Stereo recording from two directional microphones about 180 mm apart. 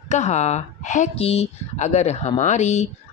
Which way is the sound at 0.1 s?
40° left (ahead or behind).